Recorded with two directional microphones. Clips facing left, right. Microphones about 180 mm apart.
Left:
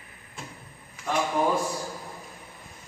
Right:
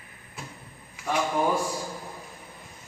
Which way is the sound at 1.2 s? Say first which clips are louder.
Even; centre (ahead or behind).